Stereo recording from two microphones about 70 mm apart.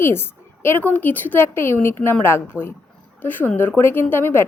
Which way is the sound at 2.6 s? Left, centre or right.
Right.